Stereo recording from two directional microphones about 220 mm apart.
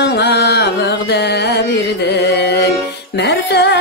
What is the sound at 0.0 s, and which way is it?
Music, 50° left (ahead or behind).